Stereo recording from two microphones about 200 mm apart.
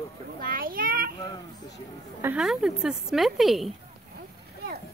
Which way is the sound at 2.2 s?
5° right (ahead or behind).